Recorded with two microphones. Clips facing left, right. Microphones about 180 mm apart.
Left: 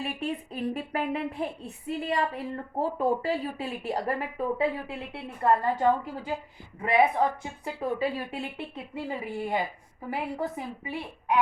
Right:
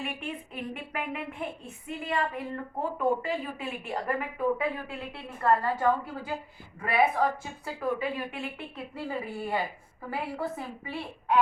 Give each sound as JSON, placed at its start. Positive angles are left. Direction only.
{"t": 0.0, "sound": "a woman's voice", "side_deg": 35}
{"t": 7.9, "sound": "speech", "side_deg": 35}
{"t": 9.0, "sound": "a woman's voice", "side_deg": 20}